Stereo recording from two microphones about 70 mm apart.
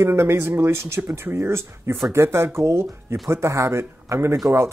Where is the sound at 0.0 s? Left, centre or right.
Right.